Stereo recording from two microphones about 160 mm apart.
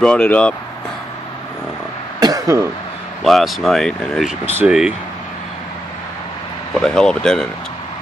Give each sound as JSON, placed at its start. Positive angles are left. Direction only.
{"t": 0.0, "sound": "speech", "side_deg": 5}
{"t": 2.1, "sound": "cough", "side_deg": -20}
{"t": 3.3, "sound": "speech", "side_deg": 0}
{"t": 6.8, "sound": "speech", "side_deg": 5}